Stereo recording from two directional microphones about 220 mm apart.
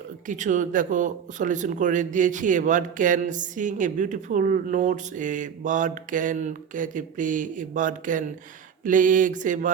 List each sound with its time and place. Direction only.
0.3 s speech: 35° right (ahead or behind)